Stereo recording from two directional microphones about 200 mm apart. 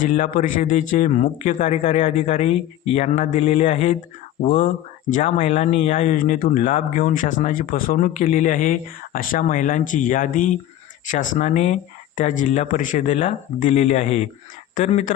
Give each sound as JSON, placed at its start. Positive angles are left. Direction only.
{"t": 0.0, "sound": "speech", "side_deg": 40}